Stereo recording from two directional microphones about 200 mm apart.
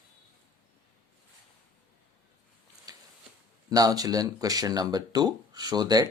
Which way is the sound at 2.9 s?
20° right (ahead or behind).